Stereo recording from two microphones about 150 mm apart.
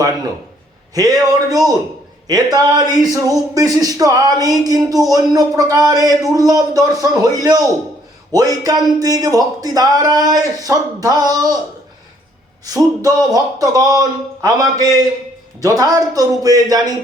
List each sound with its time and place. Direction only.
0.9 s speech: 25° right (ahead or behind)
12.6 s speech: 25° right (ahead or behind)